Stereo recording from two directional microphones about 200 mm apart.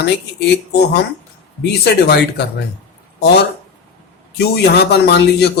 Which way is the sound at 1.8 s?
55° left (ahead or behind).